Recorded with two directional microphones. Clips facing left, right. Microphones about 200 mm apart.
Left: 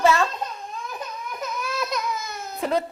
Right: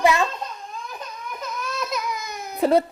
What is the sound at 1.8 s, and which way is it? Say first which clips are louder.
Baby cry: even; 5° right (ahead or behind).